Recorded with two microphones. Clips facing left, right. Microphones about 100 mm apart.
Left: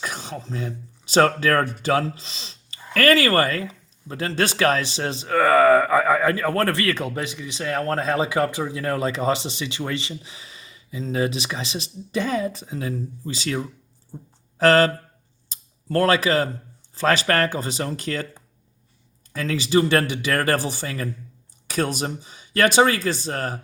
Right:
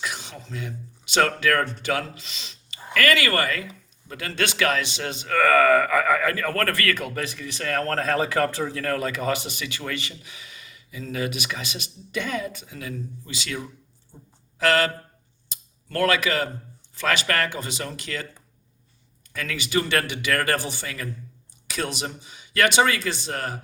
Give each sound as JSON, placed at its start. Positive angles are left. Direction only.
{"t": 0.0, "sound": "speech", "side_deg": 40}
{"t": 15.4, "sound": "a sound", "side_deg": 30}
{"t": 16.9, "sound": "speech", "side_deg": 35}